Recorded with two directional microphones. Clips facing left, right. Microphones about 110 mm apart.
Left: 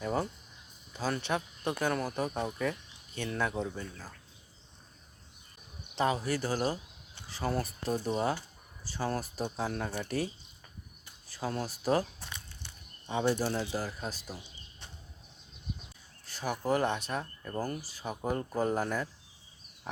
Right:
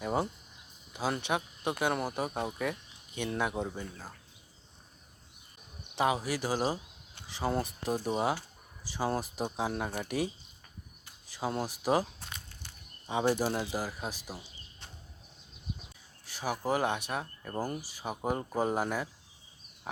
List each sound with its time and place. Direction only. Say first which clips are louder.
0.0 s a sound: right 1 dB; 15° right (ahead or behind)
0.9 s speech: right 1 dB; 15° right (ahead or behind)
6.0 s speech: even; 15° right (ahead or behind)
13.1 s speech: right 1 dB; 15° right (ahead or behind)
16.2 s speech: even; 10° right (ahead or behind)